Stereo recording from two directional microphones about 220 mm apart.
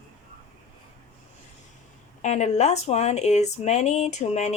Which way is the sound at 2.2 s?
30° left (ahead or behind).